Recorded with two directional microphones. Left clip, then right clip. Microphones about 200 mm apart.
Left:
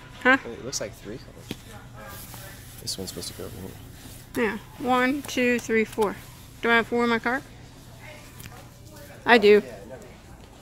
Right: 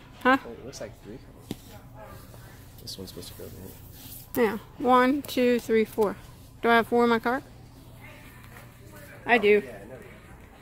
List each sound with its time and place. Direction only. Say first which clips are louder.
0.2 s speech: left 2 dB; 15° right (ahead or behind)
2.8 s speech: left 6 dB; 35° left (ahead or behind)
4.4 s speech: right 1 dB; 20° right (ahead or behind)
6.6 s speech: right 1 dB; 20° right (ahead or behind)
9.2 s a man's voice: left 4 dB; 20° left (ahead or behind)